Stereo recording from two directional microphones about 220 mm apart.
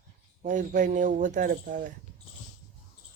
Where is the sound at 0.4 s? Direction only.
35° right (ahead or behind).